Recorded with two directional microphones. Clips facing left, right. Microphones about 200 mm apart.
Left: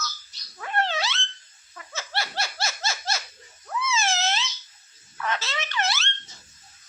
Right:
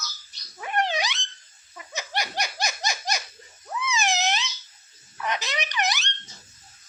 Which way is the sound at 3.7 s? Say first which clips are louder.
Even; 15° right (ahead or behind).